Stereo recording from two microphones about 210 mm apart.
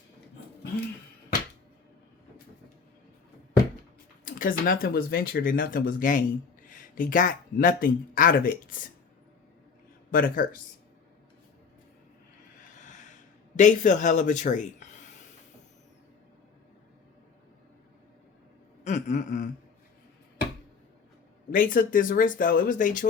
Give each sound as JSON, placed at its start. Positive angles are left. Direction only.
{"t": 4.3, "sound": "speech", "side_deg": 40}
{"t": 10.1, "sound": "speech", "side_deg": 40}
{"t": 12.8, "sound": "snort", "side_deg": 35}
{"t": 13.6, "sound": "speech", "side_deg": 35}
{"t": 18.9, "sound": "a sound", "side_deg": 35}
{"t": 21.5, "sound": "speech", "side_deg": 40}